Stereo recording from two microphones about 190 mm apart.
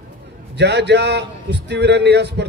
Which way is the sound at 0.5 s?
65° right (ahead or behind).